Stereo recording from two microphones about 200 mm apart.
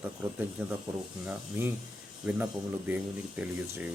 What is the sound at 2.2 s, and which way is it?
Speech, 5° right (ahead or behind).